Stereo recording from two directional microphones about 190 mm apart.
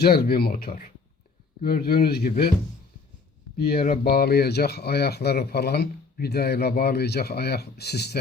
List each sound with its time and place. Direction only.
0.0 s speech: 55° left (ahead or behind)
3.6 s speech: 55° left (ahead or behind)